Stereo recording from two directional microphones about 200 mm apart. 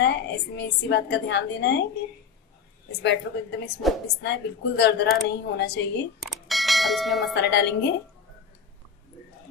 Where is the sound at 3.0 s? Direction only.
60° left (ahead or behind).